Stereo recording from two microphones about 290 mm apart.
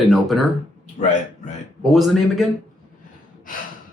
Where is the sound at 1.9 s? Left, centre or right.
Centre.